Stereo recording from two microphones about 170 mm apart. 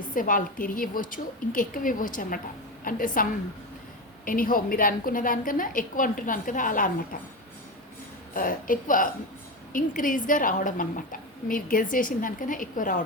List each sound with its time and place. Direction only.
0.1 s a woman's voice: 50° left (ahead or behind)
4.3 s a woman's voice: 55° left (ahead or behind)
8.3 s a woman's voice: 55° left (ahead or behind)